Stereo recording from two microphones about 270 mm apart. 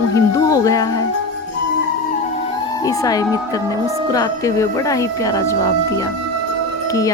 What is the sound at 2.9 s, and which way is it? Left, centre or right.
Speech, centre.